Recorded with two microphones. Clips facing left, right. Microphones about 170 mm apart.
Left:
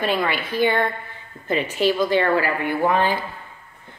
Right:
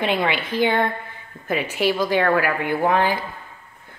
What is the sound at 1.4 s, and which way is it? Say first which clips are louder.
Speech: left 1 dB; 10° right (ahead or behind).